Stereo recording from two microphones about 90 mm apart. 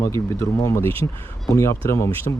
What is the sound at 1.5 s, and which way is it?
Speech, 35° left (ahead or behind).